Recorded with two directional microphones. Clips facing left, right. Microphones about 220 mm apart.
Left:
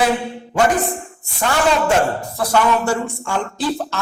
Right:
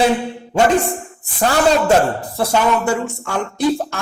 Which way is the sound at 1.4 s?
35° right (ahead or behind).